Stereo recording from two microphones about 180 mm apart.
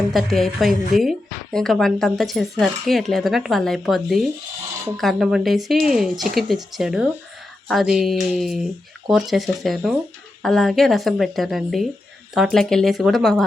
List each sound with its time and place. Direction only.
0.1 s speech: centre (ahead or behind)